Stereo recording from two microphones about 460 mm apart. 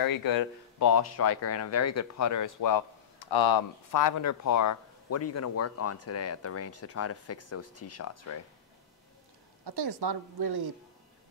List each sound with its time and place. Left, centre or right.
0.0 s speech: left
9.7 s a woman's voice: right